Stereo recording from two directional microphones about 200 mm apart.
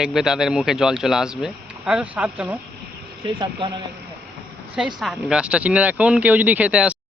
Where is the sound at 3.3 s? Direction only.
25° right (ahead or behind).